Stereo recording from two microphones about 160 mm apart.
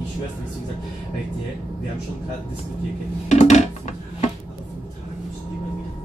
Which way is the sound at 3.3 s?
45° left (ahead or behind).